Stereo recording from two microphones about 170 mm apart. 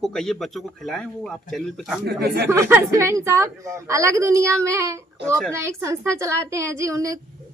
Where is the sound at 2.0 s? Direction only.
70° right (ahead or behind).